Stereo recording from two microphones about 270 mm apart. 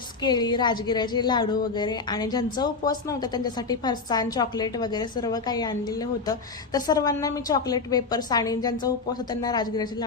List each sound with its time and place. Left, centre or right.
0.2 s a woman's voice: centre